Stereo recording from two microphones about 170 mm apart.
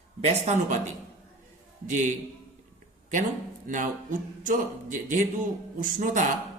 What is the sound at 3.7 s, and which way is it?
Speech, 50° right (ahead or behind).